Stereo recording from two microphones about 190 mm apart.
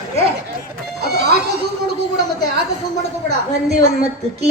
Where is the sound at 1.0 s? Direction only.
55° right (ahead or behind).